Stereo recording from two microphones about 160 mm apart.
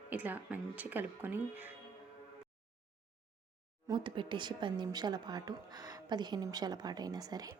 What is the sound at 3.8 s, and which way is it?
Speech, 30° right (ahead or behind).